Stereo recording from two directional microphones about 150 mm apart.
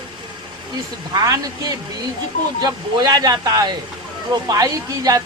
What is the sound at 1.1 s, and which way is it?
Speech, 25° right (ahead or behind).